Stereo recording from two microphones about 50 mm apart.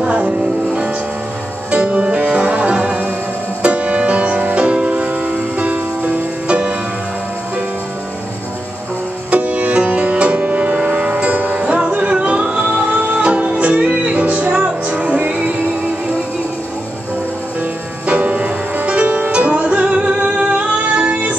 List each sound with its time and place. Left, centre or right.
0.0 s music: right
1.7 s music: right
9.3 s music: right
18.0 s music: right